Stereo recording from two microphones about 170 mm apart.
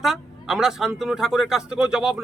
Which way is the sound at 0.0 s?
Centre (ahead or behind).